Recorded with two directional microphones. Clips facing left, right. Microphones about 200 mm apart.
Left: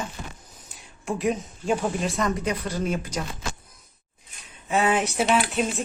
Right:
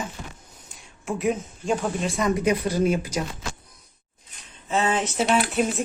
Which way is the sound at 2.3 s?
10° right (ahead or behind).